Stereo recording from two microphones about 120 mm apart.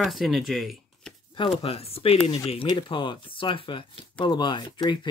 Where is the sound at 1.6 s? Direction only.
55° left (ahead or behind).